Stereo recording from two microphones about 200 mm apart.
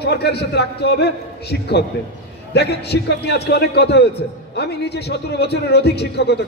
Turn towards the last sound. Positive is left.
turn(degrees=55)  # may be behind; listen again after turning